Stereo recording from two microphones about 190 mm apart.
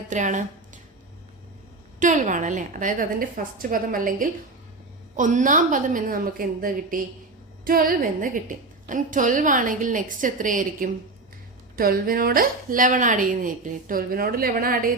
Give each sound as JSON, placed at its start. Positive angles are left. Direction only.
{"t": 0.1, "sound": "speech", "side_deg": -40}
{"t": 2.0, "sound": "a woman's voice", "side_deg": -40}